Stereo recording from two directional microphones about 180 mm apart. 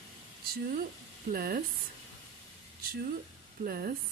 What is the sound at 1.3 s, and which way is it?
Speech, 60° right (ahead or behind).